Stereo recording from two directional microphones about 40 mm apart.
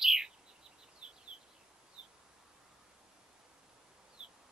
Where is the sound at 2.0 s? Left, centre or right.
Right.